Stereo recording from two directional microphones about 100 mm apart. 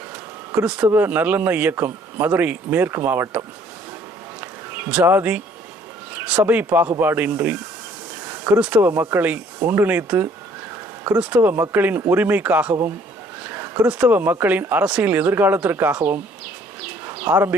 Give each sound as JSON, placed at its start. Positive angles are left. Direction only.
{"t": 0.6, "sound": "speech", "side_deg": -15}
{"t": 4.4, "sound": "bee", "side_deg": -15}
{"t": 6.1, "sound": "speech", "side_deg": -15}
{"t": 8.8, "sound": "speech", "side_deg": -25}
{"t": 13.4, "sound": "a sound", "side_deg": -20}
{"t": 13.8, "sound": "speech", "side_deg": -15}